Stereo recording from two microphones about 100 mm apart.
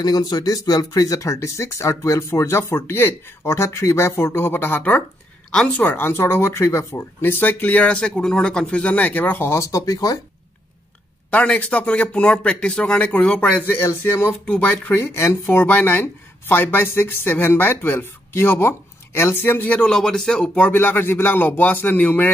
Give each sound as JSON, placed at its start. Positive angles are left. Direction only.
{"t": 0.0, "sound": "speech", "side_deg": 40}
{"t": 11.2, "sound": "speech", "side_deg": 15}